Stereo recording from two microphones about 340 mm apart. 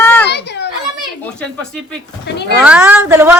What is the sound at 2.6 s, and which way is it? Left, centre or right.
Speech, centre.